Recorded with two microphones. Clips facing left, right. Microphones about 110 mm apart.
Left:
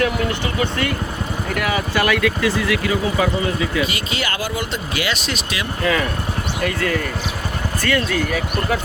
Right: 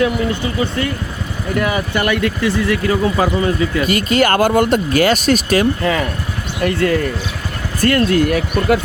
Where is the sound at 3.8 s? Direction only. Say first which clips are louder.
Right 8 dB; 50° right (ahead or behind).